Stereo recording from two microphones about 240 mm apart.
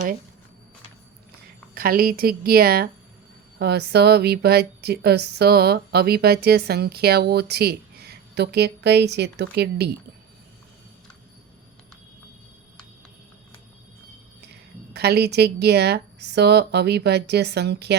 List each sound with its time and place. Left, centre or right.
1.7 s a woman's voice: right
14.4 s speech: right